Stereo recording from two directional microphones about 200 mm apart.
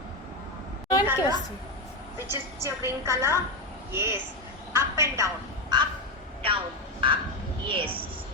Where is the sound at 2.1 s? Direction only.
10° right (ahead or behind).